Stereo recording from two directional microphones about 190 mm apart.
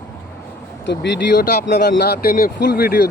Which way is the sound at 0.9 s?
65° left (ahead or behind).